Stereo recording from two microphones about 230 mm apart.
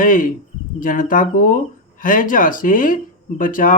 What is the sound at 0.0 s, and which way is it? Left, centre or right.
Speech, left.